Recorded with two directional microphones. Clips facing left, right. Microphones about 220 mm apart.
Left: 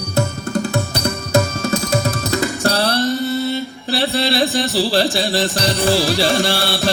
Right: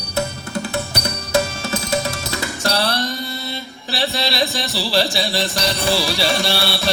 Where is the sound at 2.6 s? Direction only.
40° left (ahead or behind).